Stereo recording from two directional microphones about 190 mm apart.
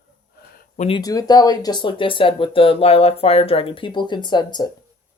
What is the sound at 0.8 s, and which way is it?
Speech, 25° left (ahead or behind).